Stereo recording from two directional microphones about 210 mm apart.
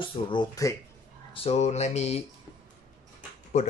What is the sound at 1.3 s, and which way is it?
Speech, 30° left (ahead or behind).